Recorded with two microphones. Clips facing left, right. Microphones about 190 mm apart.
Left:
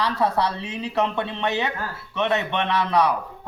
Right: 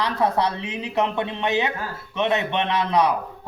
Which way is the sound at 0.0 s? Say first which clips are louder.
Right 1 dB; 20° right (ahead or behind).